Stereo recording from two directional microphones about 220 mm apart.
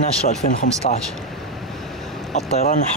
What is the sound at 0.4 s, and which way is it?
Speech, 30° left (ahead or behind).